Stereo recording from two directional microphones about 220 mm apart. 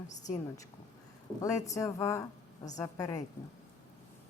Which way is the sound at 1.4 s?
15° left (ahead or behind).